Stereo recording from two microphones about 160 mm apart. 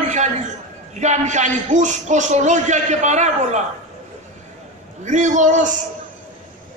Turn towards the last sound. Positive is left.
turn(degrees=-50)  # may be behind; listen again after turning